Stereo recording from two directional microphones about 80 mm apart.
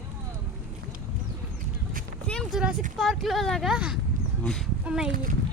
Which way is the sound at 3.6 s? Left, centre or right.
Centre.